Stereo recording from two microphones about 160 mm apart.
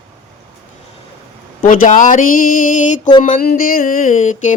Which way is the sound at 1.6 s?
60° left (ahead or behind).